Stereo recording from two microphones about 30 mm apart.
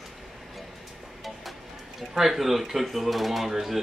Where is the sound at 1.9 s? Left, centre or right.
Centre.